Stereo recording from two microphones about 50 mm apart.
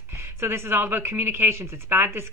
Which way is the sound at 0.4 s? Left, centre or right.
Right.